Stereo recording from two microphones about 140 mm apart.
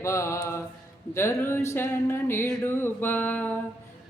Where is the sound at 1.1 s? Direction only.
20° left (ahead or behind).